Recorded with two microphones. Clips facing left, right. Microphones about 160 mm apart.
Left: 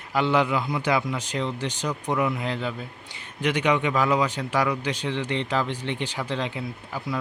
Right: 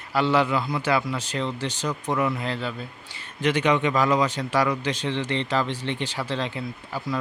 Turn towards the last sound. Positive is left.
turn(degrees=10)  # may be behind; listen again after turning